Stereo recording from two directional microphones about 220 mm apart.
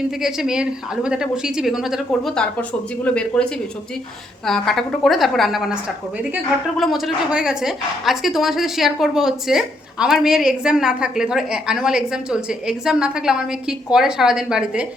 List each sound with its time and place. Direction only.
0.2 s a woman's voice: centre (ahead or behind)
4.4 s a woman's voice: centre (ahead or behind)